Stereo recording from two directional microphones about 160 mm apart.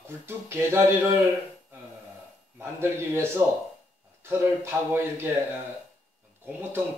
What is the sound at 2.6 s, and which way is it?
Speech, 15° right (ahead or behind).